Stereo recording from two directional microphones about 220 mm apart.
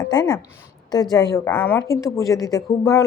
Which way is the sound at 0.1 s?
20° left (ahead or behind).